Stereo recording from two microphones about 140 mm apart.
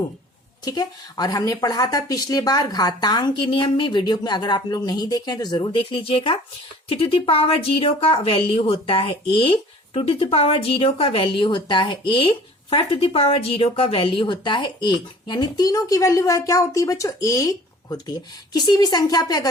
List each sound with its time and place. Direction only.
0.6 s a woman's voice: 30° left (ahead or behind)